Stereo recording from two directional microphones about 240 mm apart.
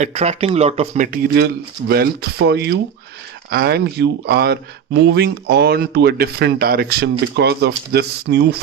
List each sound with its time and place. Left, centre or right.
0.0 s speech: right